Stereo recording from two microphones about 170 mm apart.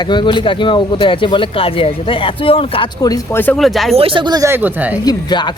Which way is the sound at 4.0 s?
30° right (ahead or behind).